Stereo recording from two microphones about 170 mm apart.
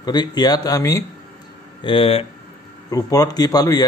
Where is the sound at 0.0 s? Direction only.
25° left (ahead or behind).